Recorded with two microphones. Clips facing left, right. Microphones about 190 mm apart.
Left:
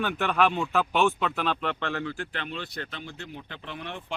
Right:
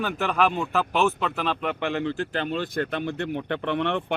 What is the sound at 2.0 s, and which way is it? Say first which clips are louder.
Speech: right 7 dB; 30° right (ahead or behind).